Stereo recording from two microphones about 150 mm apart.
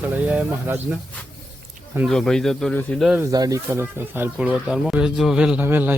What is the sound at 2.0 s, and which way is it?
Speech, 5° left (ahead or behind).